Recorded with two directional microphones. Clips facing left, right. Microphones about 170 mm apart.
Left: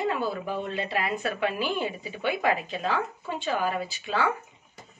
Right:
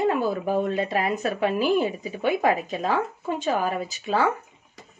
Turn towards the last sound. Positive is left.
turn(degrees=-40)  # may be behind; listen again after turning